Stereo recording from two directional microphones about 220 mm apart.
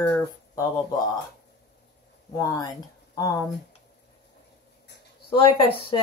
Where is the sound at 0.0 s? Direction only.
10° left (ahead or behind).